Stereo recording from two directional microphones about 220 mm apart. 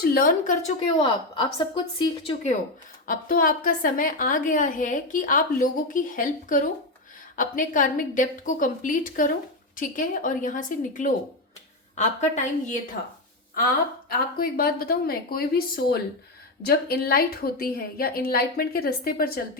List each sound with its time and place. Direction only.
0.0 s a woman's voice: 40° left (ahead or behind)
1.0 s a woman's voice: 20° left (ahead or behind)
3.1 s a woman's voice: 40° left (ahead or behind)
14.3 s a woman's voice: 45° left (ahead or behind)